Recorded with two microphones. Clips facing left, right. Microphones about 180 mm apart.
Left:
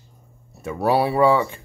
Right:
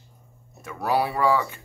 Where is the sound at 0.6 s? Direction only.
30° left (ahead or behind).